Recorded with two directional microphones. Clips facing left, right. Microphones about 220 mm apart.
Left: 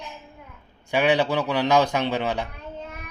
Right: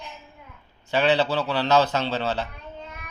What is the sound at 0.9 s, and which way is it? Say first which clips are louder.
Speech: left 1 dB; 15° left (ahead or behind).